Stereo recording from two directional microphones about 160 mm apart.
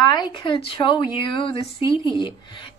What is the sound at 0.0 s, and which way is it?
A woman's voice, 25° left (ahead or behind).